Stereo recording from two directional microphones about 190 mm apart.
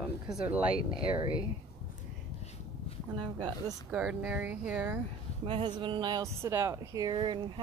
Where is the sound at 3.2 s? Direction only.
25° right (ahead or behind).